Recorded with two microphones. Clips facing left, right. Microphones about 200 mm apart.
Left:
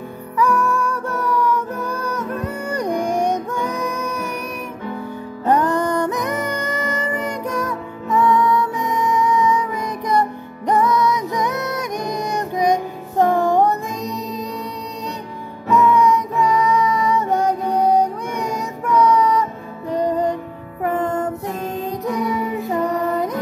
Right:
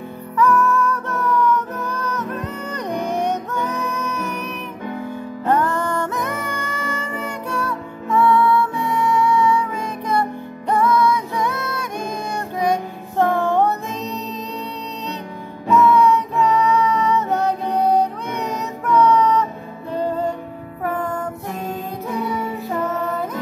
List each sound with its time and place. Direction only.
0.4 s music: 15° left (ahead or behind)
5.4 s music: 15° left (ahead or behind)
12.1 s child singing: 20° left (ahead or behind)
13.2 s music: 15° left (ahead or behind)
15.7 s music: 15° left (ahead or behind)
22.7 s music: 15° left (ahead or behind)